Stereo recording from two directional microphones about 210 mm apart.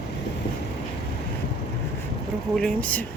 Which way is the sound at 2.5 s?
5° left (ahead or behind).